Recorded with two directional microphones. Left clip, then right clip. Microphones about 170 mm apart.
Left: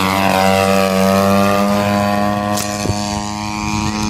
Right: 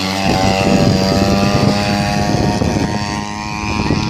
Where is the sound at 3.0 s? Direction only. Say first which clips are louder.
Even; 25° left (ahead or behind).